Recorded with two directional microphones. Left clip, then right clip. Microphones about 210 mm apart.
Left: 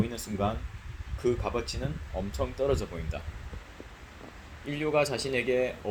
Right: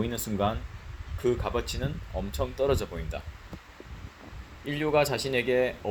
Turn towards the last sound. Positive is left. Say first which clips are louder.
# right 2 dB
turn(degrees=-20)  # may be behind; listen again after turning